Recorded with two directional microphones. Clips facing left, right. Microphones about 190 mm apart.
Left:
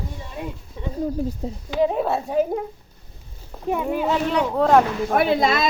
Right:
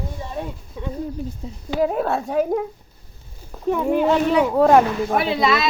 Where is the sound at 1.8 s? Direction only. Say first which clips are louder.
Even; centre (ahead or behind).